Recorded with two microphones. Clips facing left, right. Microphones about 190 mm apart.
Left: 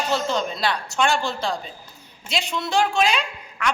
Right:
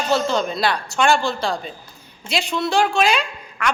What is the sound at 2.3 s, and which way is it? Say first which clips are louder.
Speech: right 3 dB; 75° right (ahead or behind).